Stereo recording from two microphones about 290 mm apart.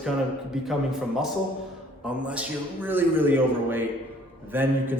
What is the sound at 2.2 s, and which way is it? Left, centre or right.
A man's voice, centre.